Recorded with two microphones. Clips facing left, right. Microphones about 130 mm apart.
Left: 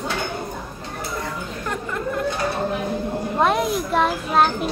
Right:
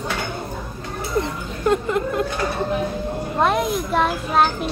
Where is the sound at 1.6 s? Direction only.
20° right (ahead or behind).